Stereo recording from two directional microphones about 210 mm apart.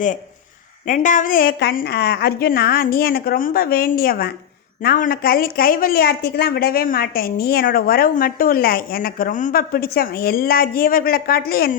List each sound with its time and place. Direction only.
0.9 s a woman's voice: 40° left (ahead or behind)